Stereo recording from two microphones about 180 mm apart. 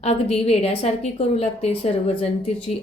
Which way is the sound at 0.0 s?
35° left (ahead or behind).